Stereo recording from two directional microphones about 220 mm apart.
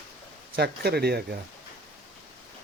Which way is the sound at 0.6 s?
45° right (ahead or behind).